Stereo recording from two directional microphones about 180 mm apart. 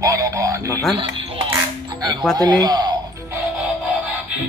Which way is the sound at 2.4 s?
20° right (ahead or behind).